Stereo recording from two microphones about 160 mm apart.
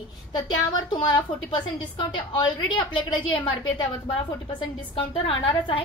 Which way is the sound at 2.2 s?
30° left (ahead or behind).